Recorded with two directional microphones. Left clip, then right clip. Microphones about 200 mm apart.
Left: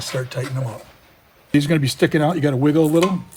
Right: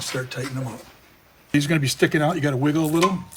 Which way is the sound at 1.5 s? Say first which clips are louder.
Left 3 dB; 45° left (ahead or behind).